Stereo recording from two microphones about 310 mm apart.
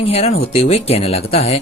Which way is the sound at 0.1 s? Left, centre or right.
Centre.